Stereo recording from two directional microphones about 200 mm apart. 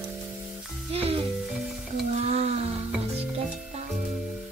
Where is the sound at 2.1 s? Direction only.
30° right (ahead or behind).